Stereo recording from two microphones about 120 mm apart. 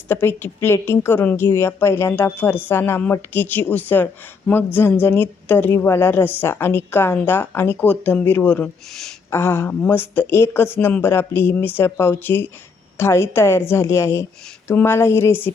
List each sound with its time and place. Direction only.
0.1 s a woman's voice: 15° left (ahead or behind)
8.9 s speech: centre (ahead or behind)
9.3 s speech: 20° left (ahead or behind)